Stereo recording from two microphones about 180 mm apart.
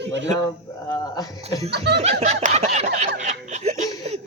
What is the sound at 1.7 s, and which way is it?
Speech, 65° right (ahead or behind).